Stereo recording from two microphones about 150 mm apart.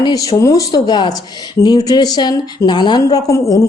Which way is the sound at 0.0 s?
25° left (ahead or behind).